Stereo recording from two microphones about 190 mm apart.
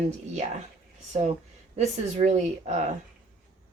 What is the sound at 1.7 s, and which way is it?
A woman's voice, 35° right (ahead or behind).